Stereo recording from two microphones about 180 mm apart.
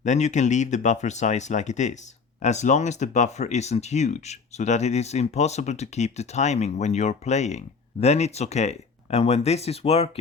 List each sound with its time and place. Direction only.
0.0 s speech: 40° left (ahead or behind)